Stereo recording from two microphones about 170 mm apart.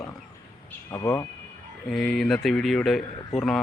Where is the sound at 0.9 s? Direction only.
15° left (ahead or behind).